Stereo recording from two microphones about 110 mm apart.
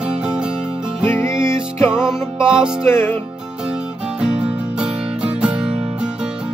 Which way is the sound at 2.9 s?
20° left (ahead or behind).